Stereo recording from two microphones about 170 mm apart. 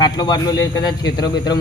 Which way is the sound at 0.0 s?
25° left (ahead or behind).